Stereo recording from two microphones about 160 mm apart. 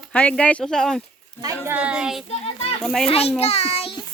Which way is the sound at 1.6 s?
10° right (ahead or behind).